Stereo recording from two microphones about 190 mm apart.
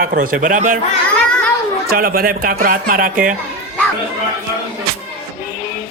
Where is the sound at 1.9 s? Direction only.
50° right (ahead or behind).